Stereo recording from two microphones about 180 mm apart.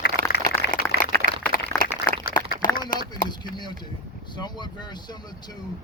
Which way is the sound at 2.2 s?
50° left (ahead or behind).